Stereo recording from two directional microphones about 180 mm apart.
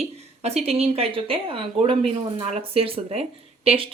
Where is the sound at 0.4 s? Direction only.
35° right (ahead or behind).